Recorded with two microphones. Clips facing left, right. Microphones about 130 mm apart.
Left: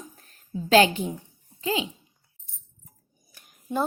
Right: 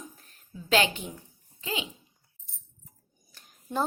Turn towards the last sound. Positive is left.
turn(degrees=10)  # may be behind; listen again after turning